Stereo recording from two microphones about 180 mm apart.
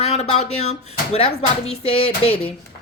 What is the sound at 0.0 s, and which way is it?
Speech, 35° left (ahead or behind).